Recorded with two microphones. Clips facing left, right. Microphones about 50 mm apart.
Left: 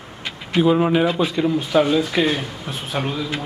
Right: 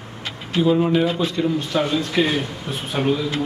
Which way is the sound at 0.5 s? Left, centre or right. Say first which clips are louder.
Left 1 dB; left.